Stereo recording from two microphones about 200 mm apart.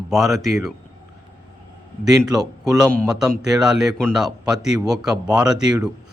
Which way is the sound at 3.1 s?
5° right (ahead or behind).